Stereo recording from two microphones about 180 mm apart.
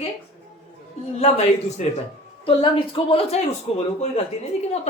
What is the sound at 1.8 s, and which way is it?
Speech, 40° left (ahead or behind).